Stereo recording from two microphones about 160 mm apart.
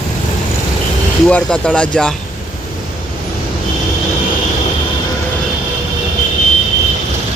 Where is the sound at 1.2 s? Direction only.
5° left (ahead or behind).